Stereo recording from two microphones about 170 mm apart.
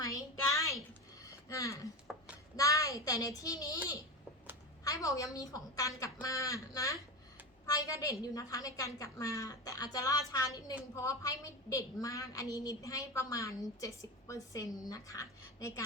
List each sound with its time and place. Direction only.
0.0 s a sound: 20° left (ahead or behind)
2.1 s a child's voice: 5° right (ahead or behind)
2.6 s a woman's voice: 20° left (ahead or behind)
4.8 s a woman's voice: 20° left (ahead or behind)